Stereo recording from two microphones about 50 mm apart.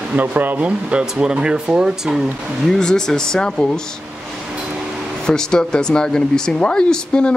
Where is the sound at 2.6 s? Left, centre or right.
Centre.